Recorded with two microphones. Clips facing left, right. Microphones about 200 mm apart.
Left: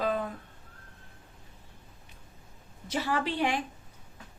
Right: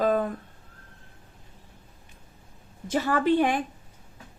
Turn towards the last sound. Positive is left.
turn(degrees=-50)  # may be behind; listen again after turning